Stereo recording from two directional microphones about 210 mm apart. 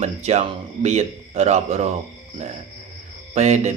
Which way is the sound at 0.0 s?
30° right (ahead or behind).